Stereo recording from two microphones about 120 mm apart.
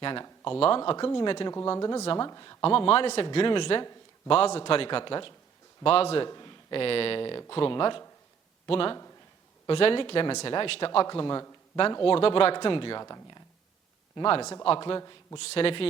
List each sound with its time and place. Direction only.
0.0 s speech: 40° left (ahead or behind)
1.5 s speech: 30° left (ahead or behind)
2.6 s speech: 50° left (ahead or behind)
4.3 s a man's voice: 55° left (ahead or behind)
6.2 s speech: 35° left (ahead or behind)
12.0 s speech: 50° left (ahead or behind); by 13.4 s 30° left (ahead or behind)
14.2 s speech: 50° left (ahead or behind); by 15.4 s 30° left (ahead or behind)
15.4 s speech: 55° left (ahead or behind)